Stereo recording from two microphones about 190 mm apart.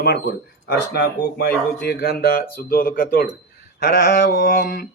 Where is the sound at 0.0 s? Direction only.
55° left (ahead or behind).